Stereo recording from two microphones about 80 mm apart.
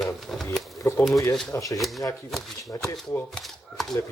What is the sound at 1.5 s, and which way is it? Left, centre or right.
Speech, left.